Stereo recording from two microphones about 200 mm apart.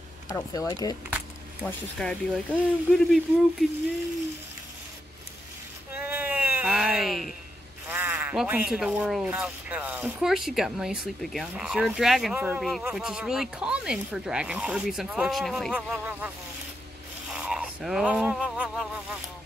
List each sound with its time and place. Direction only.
0.3 s speech: 15° left (ahead or behind)
1.6 s speech: 5° left (ahead or behind)
5.9 s a sound: 10° right (ahead or behind)
7.9 s speech: 10° right (ahead or behind)
17.3 s speech: 5° right (ahead or behind)